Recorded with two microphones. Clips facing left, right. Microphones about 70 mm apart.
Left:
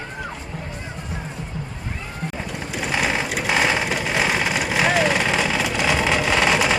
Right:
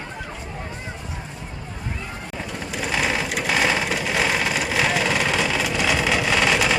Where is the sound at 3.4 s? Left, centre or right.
Centre.